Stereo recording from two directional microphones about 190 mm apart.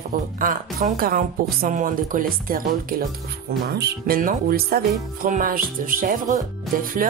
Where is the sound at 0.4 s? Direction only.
45° right (ahead or behind).